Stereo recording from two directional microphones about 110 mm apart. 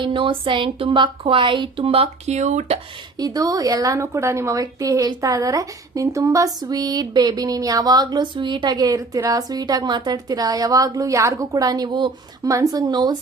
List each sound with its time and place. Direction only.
0.0 s speech: 50° right (ahead or behind); by 2.7 s 90° right
3.2 s a woman's voice: 35° right (ahead or behind)
12.5 s a woman's voice: 35° right (ahead or behind)